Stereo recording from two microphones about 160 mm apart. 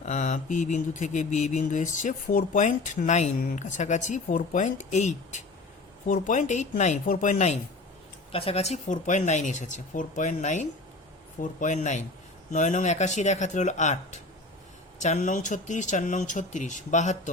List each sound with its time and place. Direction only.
0.0 s speech: 50° left (ahead or behind)